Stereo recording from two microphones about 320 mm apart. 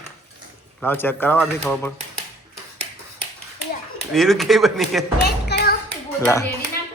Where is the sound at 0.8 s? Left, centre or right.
Centre.